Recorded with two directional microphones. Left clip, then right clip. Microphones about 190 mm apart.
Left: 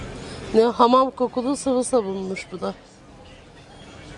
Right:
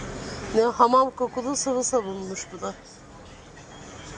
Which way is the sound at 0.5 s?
40° left (ahead or behind).